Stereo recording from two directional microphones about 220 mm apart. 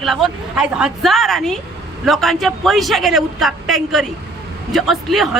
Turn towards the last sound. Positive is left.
turn(degrees=0)  # may be behind; listen again after turning